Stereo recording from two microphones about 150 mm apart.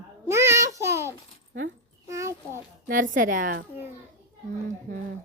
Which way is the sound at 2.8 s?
60° right (ahead or behind).